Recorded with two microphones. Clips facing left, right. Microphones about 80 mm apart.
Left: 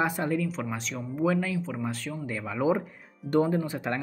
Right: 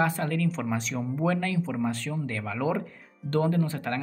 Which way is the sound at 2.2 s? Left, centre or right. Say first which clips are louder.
Left 3 dB; centre.